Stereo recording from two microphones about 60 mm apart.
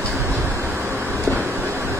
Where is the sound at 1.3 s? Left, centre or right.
Right.